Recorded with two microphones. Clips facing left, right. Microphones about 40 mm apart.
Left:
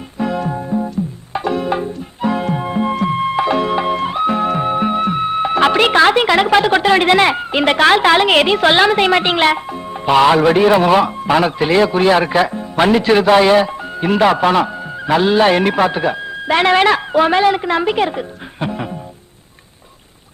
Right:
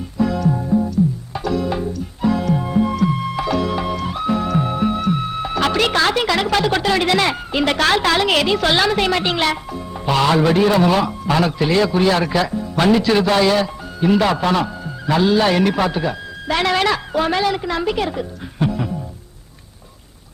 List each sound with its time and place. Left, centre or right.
0.2 s music: left
11.3 s a man's voice: left